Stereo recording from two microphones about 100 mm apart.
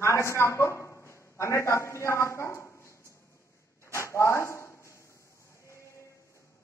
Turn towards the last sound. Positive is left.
turn(degrees=30)  # may be behind; listen again after turning